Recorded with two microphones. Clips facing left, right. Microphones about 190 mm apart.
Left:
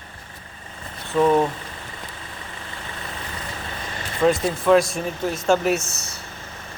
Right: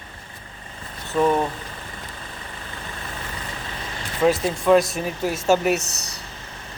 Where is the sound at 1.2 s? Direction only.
Centre (ahead or behind).